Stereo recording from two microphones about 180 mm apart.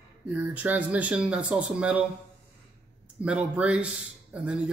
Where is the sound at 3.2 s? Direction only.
5° right (ahead or behind).